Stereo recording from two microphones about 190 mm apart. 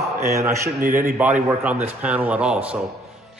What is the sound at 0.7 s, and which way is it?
Speech, 45° right (ahead or behind).